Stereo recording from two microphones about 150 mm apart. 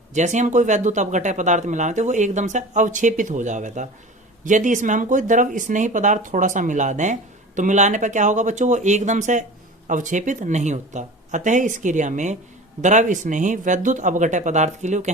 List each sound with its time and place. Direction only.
0.1 s speech: 55° right (ahead or behind)